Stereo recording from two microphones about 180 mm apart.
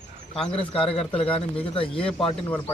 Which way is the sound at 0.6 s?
30° left (ahead or behind).